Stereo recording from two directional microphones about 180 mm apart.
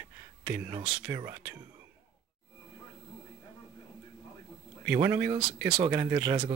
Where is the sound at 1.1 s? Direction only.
15° right (ahead or behind).